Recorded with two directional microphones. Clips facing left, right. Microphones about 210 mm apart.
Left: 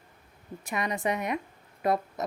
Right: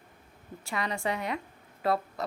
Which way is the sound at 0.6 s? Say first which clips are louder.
Left 2 dB; 20° left (ahead or behind).